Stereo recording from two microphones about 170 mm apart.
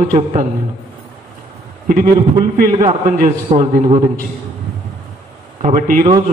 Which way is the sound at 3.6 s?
40° right (ahead or behind).